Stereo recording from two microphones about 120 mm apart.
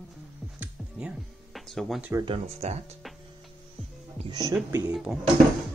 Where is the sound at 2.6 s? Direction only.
70° right (ahead or behind).